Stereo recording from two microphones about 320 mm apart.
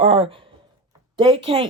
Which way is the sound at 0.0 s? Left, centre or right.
Centre.